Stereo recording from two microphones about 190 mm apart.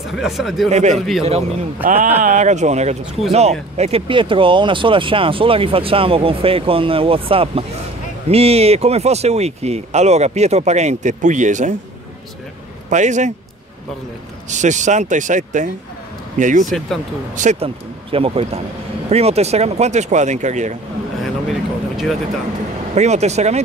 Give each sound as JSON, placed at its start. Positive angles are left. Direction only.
{"t": 0.1, "sound": "speech", "side_deg": 0}
{"t": 0.7, "sound": "speech", "side_deg": -35}
{"t": 0.9, "sound": "speech", "side_deg": 0}
{"t": 2.2, "sound": "speech", "side_deg": -40}
{"t": 12.9, "sound": "speech", "side_deg": -40}
{"t": 14.5, "sound": "speech", "side_deg": -40}
{"t": 16.6, "sound": "speech", "side_deg": 0}
{"t": 17.4, "sound": "speech", "side_deg": -40}
{"t": 21.2, "sound": "speech", "side_deg": 0}
{"t": 22.9, "sound": "speech", "side_deg": -35}